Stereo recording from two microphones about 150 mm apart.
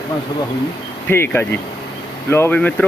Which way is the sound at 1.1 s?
15° left (ahead or behind).